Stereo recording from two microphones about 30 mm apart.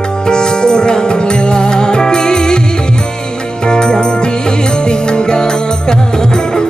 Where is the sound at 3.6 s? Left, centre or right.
Left.